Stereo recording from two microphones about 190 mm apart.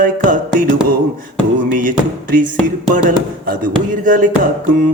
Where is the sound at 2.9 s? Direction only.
45° right (ahead or behind).